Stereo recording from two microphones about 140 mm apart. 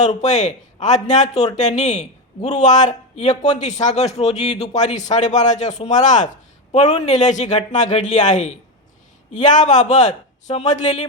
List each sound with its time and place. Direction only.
0.2 s a man's voice: 60° left (ahead or behind)